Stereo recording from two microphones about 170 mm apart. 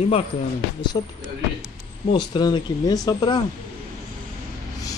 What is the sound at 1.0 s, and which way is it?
Speech, 25° left (ahead or behind).